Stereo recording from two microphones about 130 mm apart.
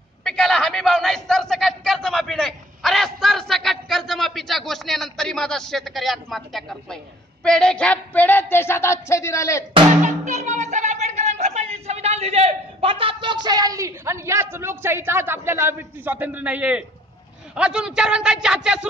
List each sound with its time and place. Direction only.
0.2 s a sound: 5° left (ahead or behind)
7.4 s speech: 5° left (ahead or behind); by 9.7 s 25° left (ahead or behind)
10.0 s a man's voice: 70° right (ahead or behind); by 18.9 s 5° right (ahead or behind)